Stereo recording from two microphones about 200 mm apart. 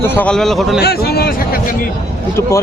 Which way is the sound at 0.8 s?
50° left (ahead or behind).